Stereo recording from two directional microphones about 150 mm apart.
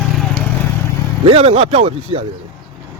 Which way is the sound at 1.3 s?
40° right (ahead or behind).